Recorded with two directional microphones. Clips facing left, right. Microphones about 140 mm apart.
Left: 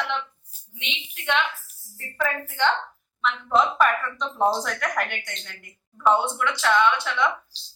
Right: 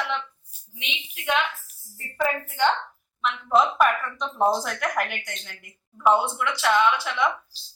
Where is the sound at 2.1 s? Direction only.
15° right (ahead or behind).